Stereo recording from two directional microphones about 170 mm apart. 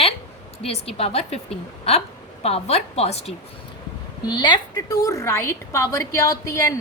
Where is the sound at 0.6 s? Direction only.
35° left (ahead or behind).